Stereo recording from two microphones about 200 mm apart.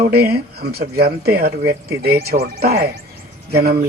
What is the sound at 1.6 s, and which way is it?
Speech, 15° right (ahead or behind).